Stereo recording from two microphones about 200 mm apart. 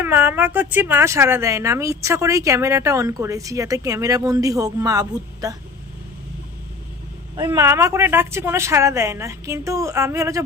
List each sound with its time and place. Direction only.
0.0 s speech: 10° right (ahead or behind)
7.3 s speech: 15° right (ahead or behind)